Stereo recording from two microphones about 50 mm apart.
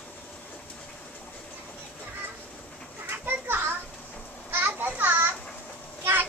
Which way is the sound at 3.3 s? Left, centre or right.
Right.